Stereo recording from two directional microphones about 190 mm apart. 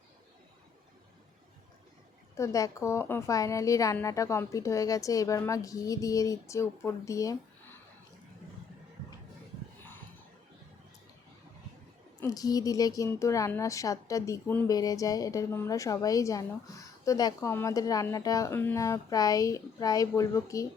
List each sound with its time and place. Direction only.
2.3 s a woman's voice: 15° left (ahead or behind)
12.2 s a woman's voice: 20° left (ahead or behind)